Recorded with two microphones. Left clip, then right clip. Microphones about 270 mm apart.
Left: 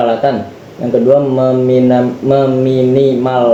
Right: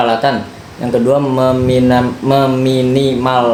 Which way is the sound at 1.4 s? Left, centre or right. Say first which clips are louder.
Left 2 dB; right.